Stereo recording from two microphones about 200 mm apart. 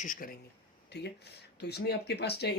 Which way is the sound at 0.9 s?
55° left (ahead or behind).